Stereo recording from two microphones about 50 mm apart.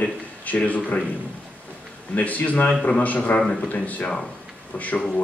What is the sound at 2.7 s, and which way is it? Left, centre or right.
Speech, centre.